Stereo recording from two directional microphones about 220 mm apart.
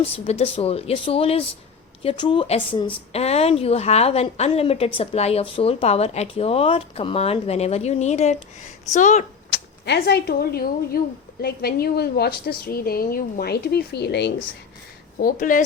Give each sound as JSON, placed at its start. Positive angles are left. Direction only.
{"t": 0.0, "sound": "a woman's voice", "side_deg": 30}
{"t": 9.5, "sound": "a woman's voice", "side_deg": 50}
{"t": 15.2, "sound": "speech", "side_deg": 35}